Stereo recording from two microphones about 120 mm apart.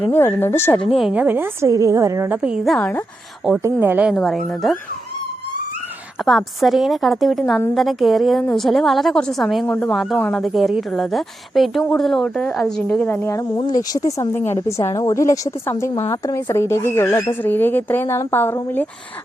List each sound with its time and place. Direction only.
0.0 s a woman's voice: 15° left (ahead or behind)
0.9 s a woman's voice: centre (ahead or behind)
1.1 s speech: 15° right (ahead or behind)
1.6 s a woman's voice: 25° right (ahead or behind)
2.6 s a woman's voice: 5° left (ahead or behind)
3.6 s speech: 20° right (ahead or behind)
4.1 s a woman's voice: 5° left (ahead or behind)
6.2 s a woman's voice: centre (ahead or behind)
9.6 s a woman's voice: 15° left (ahead or behind)
9.9 s a woman's voice: centre (ahead or behind)
13.1 s a woman's voice: 20° left (ahead or behind)
13.9 s speech: 30° left (ahead or behind)
14.3 s a woman's voice: 20° left (ahead or behind)